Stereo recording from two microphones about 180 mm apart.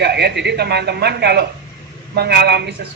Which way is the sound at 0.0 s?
65° right (ahead or behind).